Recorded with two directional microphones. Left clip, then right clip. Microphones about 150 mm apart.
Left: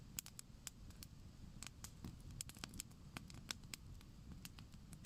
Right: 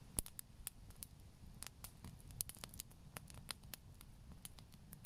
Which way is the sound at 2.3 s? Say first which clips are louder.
Right 1 dB; 15° right (ahead or behind).